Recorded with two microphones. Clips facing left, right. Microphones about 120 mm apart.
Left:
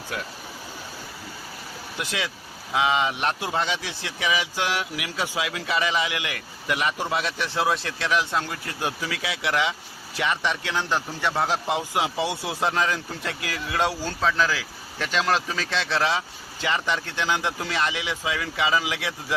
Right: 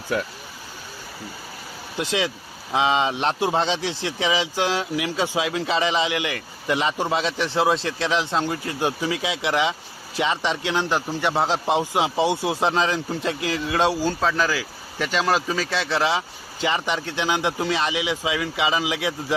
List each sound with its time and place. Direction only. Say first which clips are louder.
2.0 s a man's voice: right 6 dB; 25° right (ahead or behind)